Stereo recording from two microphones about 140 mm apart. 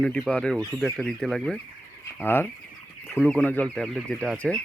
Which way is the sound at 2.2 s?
15° left (ahead or behind).